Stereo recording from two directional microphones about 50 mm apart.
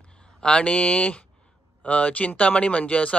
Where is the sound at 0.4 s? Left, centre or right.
Centre.